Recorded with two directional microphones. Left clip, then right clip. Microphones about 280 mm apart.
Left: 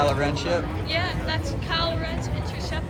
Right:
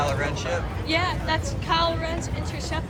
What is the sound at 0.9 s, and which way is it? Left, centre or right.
Speech, centre.